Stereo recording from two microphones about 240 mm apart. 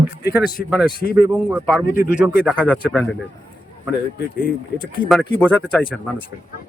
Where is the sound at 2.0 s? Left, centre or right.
Centre.